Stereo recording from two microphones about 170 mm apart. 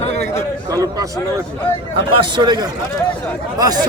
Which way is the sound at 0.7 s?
20° right (ahead or behind).